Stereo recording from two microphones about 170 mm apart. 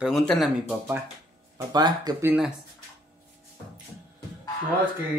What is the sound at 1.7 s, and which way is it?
Speech, 25° right (ahead or behind).